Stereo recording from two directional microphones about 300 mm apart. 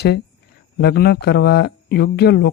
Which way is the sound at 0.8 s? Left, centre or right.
Left.